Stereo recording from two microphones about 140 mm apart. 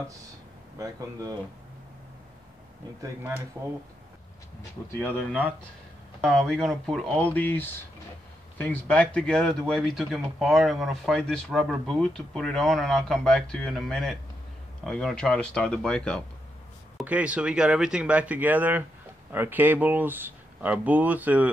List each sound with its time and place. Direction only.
0.7 s speech: 25° right (ahead or behind)
6.2 s speech: centre (ahead or behind)
17.0 s speech: 10° right (ahead or behind)